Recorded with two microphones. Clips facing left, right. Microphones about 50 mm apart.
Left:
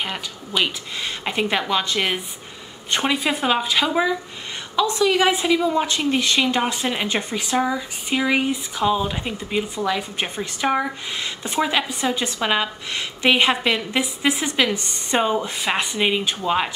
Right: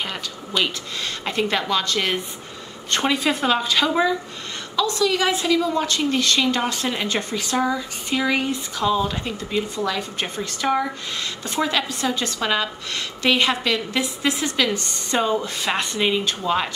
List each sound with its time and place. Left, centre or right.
0.0 s speech: centre
4.7 s speech: left